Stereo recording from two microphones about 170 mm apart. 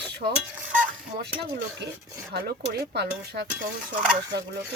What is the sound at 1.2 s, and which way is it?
Speech, 75° right (ahead or behind).